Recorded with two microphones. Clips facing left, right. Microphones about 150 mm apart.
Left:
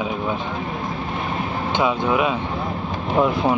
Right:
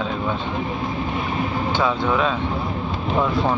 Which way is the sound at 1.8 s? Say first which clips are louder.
Left 2 dB; 15° left (ahead or behind).